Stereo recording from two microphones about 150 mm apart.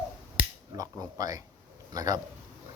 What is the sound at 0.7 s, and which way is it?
Speech, 25° right (ahead or behind).